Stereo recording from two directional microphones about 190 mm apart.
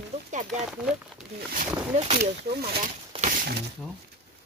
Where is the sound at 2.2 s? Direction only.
50° right (ahead or behind).